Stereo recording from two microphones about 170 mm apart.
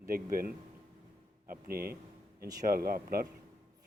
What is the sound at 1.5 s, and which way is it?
Speech, 65° right (ahead or behind).